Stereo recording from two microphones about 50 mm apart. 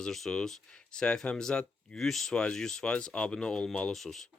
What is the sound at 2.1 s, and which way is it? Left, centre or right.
Speech, centre.